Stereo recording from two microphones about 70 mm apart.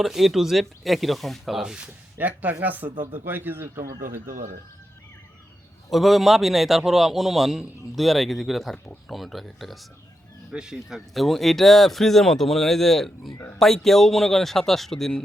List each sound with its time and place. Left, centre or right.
0.0 s a man's voice: centre
2.1 s speech: right
5.9 s a man's voice: centre
10.5 s a man's voice: centre